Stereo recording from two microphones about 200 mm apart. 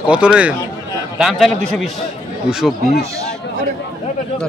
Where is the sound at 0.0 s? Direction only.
5° right (ahead or behind).